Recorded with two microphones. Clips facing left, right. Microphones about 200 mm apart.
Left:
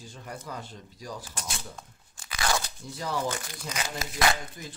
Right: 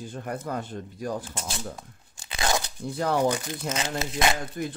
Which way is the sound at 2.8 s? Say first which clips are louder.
Right 7 dB; 60° right (ahead or behind).